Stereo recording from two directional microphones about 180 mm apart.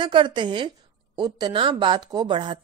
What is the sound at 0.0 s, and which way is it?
Speech, 25° right (ahead or behind).